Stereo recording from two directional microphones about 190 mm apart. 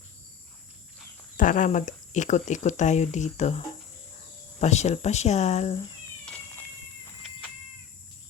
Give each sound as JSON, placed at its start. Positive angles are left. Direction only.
{"t": 1.4, "sound": "speech", "side_deg": 40}
{"t": 4.6, "sound": "speech", "side_deg": 35}
{"t": 6.2, "sound": "cat", "side_deg": 5}